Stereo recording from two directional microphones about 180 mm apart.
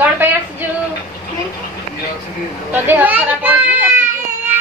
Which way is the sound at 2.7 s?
10° right (ahead or behind).